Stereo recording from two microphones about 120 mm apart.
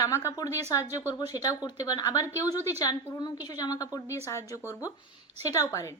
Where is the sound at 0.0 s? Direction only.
25° left (ahead or behind).